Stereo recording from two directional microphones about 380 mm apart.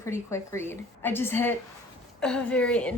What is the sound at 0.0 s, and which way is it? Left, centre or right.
A woman's voice, centre.